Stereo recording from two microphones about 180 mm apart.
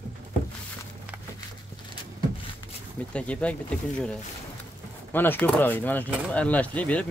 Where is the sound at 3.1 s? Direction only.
5° left (ahead or behind).